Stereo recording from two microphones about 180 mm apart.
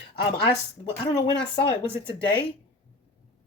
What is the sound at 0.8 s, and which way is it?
Speech, 30° left (ahead or behind).